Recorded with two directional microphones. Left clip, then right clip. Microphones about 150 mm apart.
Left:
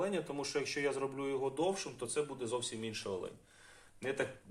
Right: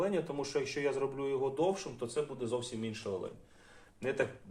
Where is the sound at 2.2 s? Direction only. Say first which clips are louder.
Right 1 dB; 50° left (ahead or behind).